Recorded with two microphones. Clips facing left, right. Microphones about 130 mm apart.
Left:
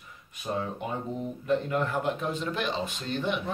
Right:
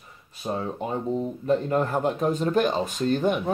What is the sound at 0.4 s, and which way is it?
Speech, 35° right (ahead or behind).